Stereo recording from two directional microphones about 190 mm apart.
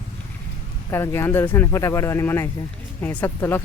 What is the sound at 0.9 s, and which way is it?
Speech, 15° left (ahead or behind).